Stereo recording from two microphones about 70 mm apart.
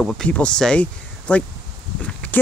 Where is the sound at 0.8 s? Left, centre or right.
Centre.